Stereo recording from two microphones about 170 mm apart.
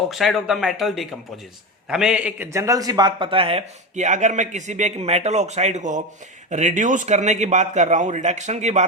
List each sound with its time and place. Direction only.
0.1 s a man's voice: centre (ahead or behind); by 8.9 s 45° right (ahead or behind)